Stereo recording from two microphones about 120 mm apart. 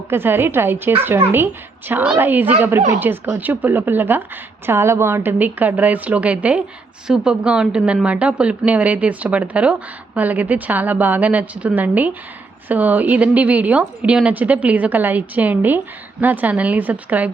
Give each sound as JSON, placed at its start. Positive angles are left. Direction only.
{"t": 0.1, "sound": "a woman's voice", "side_deg": -20}